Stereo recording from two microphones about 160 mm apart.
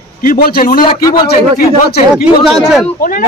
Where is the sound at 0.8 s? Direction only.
30° left (ahead or behind).